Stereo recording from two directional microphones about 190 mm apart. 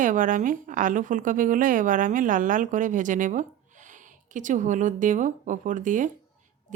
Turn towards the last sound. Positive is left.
turn(degrees=-40)  # may be behind; listen again after turning